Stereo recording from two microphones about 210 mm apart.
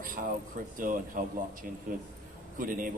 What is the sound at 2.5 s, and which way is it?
Speech, 40° right (ahead or behind).